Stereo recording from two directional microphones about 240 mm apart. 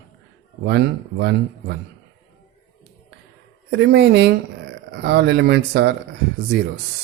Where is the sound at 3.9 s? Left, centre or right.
Right.